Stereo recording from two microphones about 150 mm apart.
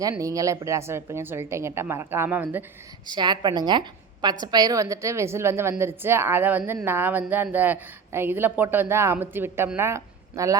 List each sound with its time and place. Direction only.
0.0 s a woman's voice: 20° right (ahead or behind)
3.1 s a woman's voice: 30° right (ahead or behind)